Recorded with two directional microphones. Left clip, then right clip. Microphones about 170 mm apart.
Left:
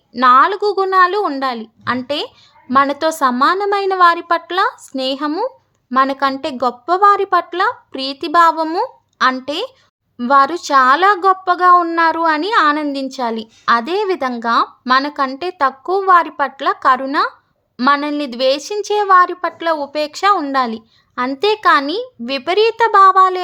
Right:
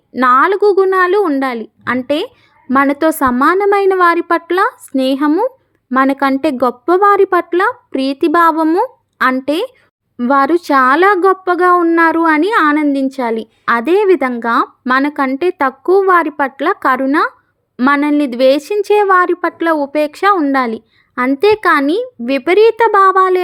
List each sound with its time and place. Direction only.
0.2 s a woman's voice: 25° right (ahead or behind)
8.6 s speech: 10° right (ahead or behind)
9.3 s a woman's voice: 25° right (ahead or behind)